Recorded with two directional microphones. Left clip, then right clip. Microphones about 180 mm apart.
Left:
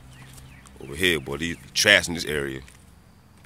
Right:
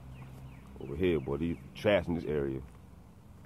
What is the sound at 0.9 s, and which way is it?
Speech, 15° left (ahead or behind).